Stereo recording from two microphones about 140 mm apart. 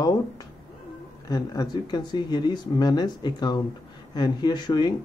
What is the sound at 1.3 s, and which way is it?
Speech, 25° left (ahead or behind).